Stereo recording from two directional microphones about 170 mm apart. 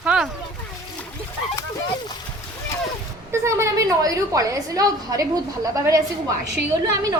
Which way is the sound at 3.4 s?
20° right (ahead or behind).